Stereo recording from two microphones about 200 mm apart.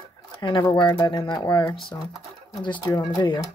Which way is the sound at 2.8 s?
20° left (ahead or behind).